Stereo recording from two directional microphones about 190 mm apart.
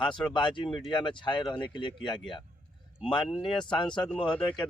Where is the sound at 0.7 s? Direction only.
Centre (ahead or behind).